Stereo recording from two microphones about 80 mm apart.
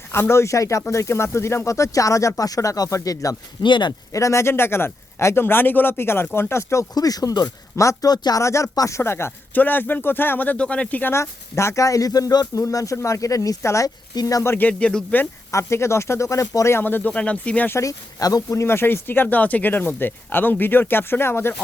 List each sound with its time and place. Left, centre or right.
0.1 s speech: left
3.6 s speech: left
4.1 s speech: left
6.9 s speech: left
8.1 s speech: left
8.4 s speech: left
9.0 s speech: left
11.1 s speech: left
12.5 s speech: left
14.4 s speech: left
14.7 s speech: centre
15.5 s speech: left
16.8 s speech: left
17.7 s speech: left